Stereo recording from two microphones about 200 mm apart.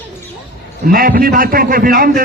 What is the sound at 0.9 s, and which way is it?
A man's voice, 45° right (ahead or behind).